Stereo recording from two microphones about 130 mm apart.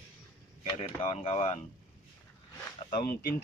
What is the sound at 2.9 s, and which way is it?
Speech, 90° left.